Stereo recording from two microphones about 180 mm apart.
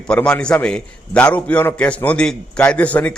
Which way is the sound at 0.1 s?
5° left (ahead or behind).